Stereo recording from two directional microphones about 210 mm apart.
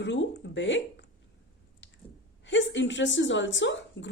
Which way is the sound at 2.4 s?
60° left (ahead or behind).